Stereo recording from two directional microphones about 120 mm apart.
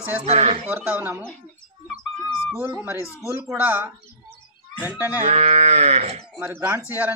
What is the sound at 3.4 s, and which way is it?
Speech, 5° right (ahead or behind).